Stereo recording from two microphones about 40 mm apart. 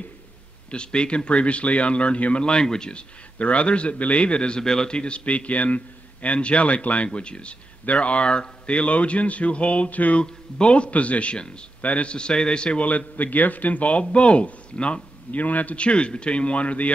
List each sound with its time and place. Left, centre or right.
0.7 s speech: left
2.4 s a man's voice: centre; by 10.2 s left
10.2 s a man's voice: left
12.8 s speech: left